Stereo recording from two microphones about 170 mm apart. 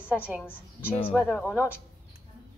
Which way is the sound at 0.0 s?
10° right (ahead or behind).